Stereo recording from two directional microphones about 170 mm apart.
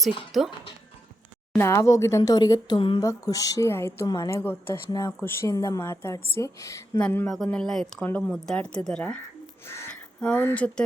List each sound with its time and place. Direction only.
0.3 s a woman's voice: centre (ahead or behind)
1.5 s a woman's voice: 15° left (ahead or behind)